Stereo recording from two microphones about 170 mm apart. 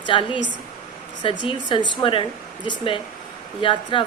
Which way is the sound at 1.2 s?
30° left (ahead or behind).